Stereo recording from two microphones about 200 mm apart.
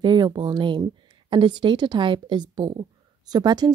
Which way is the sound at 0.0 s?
20° right (ahead or behind).